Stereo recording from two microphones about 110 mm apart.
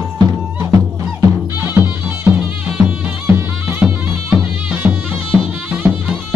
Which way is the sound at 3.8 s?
15° right (ahead or behind).